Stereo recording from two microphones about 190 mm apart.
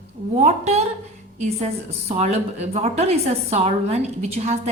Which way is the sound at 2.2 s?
35° right (ahead or behind).